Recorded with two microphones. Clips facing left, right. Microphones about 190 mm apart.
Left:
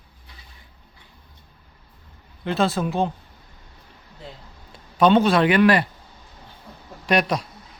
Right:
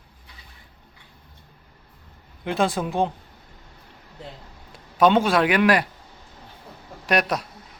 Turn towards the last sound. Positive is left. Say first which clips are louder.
# left 2 dB
turn(degrees=-5)  # may be behind; listen again after turning